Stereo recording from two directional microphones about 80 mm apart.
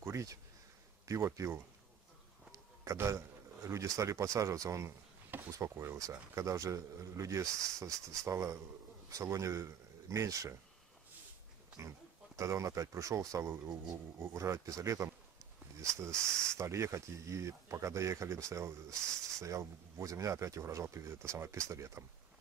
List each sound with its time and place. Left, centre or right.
0.0 s a sound: right
1.0 s speech: right
12.4 s speech: right